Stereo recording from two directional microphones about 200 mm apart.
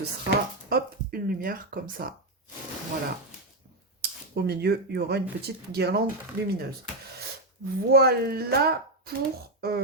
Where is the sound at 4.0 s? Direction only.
50° right (ahead or behind).